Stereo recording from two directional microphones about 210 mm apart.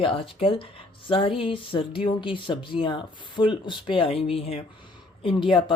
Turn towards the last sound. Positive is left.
turn(degrees=25)  # may be behind; listen again after turning